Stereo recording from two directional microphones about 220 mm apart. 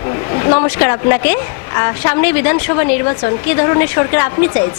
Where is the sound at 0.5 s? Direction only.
10° left (ahead or behind).